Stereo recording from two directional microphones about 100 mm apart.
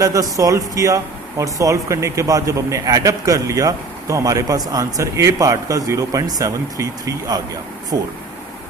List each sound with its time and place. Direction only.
0.0 s speech: 35° right (ahead or behind)